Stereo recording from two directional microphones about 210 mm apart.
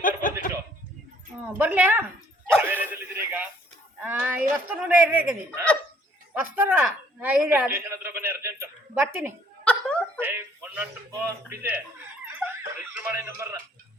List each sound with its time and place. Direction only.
0.0 s chuckle: 40° left (ahead or behind)
1.5 s a woman's voice: 10° right (ahead or behind)
2.6 s a sound: 10° right (ahead or behind)
4.0 s a woman's voice: 10° right (ahead or behind)
9.7 s a sound: 5° left (ahead or behind)
10.2 s speech: 10° right (ahead or behind)